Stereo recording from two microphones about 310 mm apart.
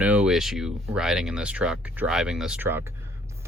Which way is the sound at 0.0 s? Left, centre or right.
Centre.